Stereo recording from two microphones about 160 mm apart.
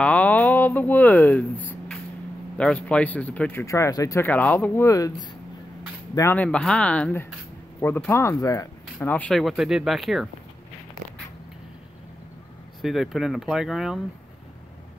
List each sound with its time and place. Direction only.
0.0 s speech: 10° left (ahead or behind)
2.5 s speech: 5° left (ahead or behind)
6.1 s speech: 15° left (ahead or behind)
12.8 s speech: centre (ahead or behind)